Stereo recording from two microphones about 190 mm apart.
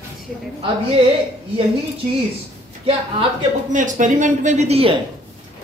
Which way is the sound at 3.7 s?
40° right (ahead or behind).